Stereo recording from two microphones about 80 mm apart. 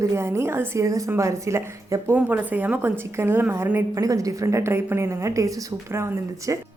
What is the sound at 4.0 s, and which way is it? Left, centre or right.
A woman's voice, right.